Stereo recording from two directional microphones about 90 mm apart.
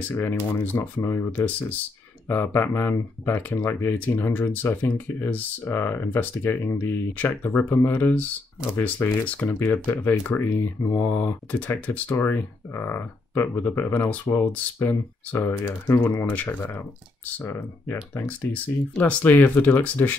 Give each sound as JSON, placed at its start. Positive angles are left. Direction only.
{"t": 0.1, "sound": "speech", "side_deg": 25}
{"t": 7.2, "sound": "speech", "side_deg": 20}